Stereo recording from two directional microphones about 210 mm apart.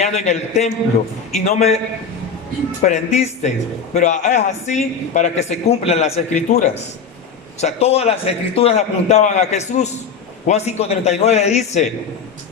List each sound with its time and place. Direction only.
0.0 s a man's voice: 30° left (ahead or behind)
2.8 s a man's voice: 35° left (ahead or behind)